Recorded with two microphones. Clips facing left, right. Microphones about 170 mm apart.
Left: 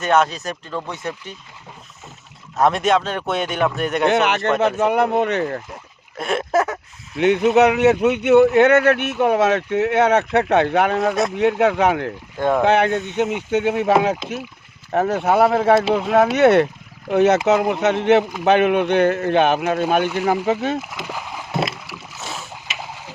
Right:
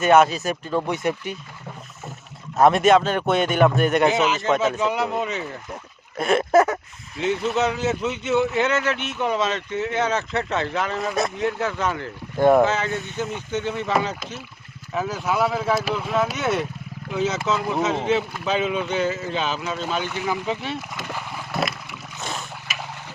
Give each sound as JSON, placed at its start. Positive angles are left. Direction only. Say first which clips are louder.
{"t": 0.0, "sound": "speech", "louder": "right 2 dB", "side_deg": -5}
{"t": 2.6, "sound": "speech", "louder": "right 2 dB", "side_deg": 0}
{"t": 4.1, "sound": "speech", "louder": "left 3 dB", "side_deg": 65}
{"t": 6.1, "sound": "speech", "louder": "right 2 dB", "side_deg": 0}
{"t": 7.2, "sound": "speech", "louder": "left 8 dB", "side_deg": 70}
{"t": 12.4, "sound": "speech", "louder": "right 4 dB", "side_deg": -10}
{"t": 12.6, "sound": "speech", "louder": "left 7 dB", "side_deg": 65}
{"t": 21.0, "sound": "a sound", "louder": "left 2 dB", "side_deg": 10}
{"t": 21.8, "sound": "boat", "louder": "even", "side_deg": 5}